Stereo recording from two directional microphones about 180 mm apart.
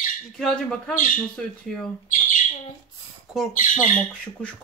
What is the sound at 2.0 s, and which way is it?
Bird, 45° left (ahead or behind).